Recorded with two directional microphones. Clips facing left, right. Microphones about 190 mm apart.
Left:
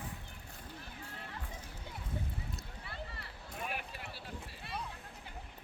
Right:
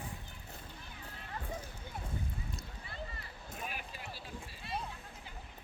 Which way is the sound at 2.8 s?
65° left (ahead or behind).